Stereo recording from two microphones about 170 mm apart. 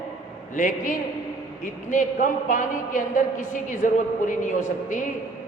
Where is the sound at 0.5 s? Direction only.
50° left (ahead or behind).